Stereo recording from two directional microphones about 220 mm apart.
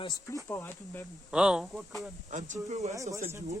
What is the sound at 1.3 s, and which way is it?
Speech, 5° right (ahead or behind).